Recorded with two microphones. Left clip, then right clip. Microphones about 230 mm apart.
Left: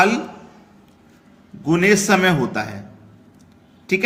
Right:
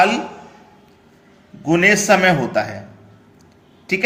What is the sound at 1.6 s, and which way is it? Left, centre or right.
Speech, centre.